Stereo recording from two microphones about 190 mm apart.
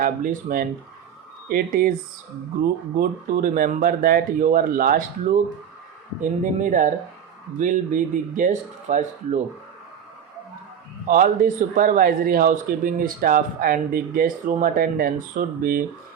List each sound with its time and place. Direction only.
0.0 s a man's voice: 45° right (ahead or behind)
6.4 s a man's voice: 45° right (ahead or behind)
11.1 s a man's voice: 45° right (ahead or behind)